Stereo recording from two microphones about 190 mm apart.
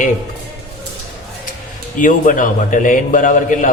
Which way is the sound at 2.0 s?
45° left (ahead or behind).